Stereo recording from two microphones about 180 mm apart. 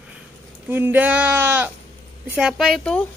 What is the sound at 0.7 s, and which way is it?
Speech, 10° right (ahead or behind).